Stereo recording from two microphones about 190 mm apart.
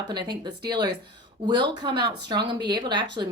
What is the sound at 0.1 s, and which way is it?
Speech, 25° right (ahead or behind).